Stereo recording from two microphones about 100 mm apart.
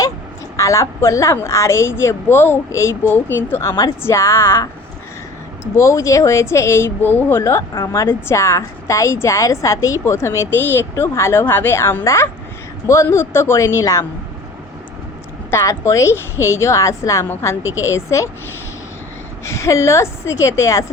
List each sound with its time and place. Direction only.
0.5 s speech: 30° left (ahead or behind)
5.7 s speech: 30° left (ahead or behind)
15.4 s speech: 30° left (ahead or behind)
19.5 s speech: 30° left (ahead or behind)